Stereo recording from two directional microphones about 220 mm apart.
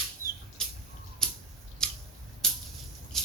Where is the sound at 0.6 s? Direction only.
5° left (ahead or behind).